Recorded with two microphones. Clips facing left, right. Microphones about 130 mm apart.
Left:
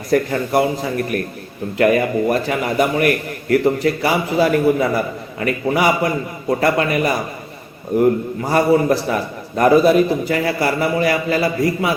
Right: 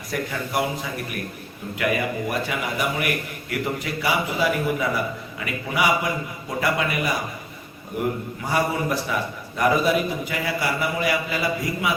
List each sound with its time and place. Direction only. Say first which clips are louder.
0.1 s a man's voice: left 10 dB; 40° left (ahead or behind)
8.4 s a man's voice: left 9 dB; 40° left (ahead or behind)